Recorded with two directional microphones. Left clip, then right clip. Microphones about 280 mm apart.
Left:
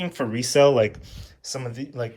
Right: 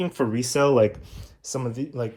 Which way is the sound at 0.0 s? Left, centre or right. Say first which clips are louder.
Right 2 dB; centre.